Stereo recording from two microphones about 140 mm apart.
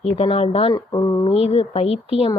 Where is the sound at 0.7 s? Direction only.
25° left (ahead or behind).